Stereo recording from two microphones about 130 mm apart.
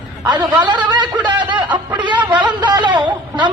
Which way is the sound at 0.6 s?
35° right (ahead or behind).